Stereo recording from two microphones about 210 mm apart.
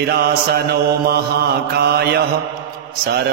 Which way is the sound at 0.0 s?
50° right (ahead or behind).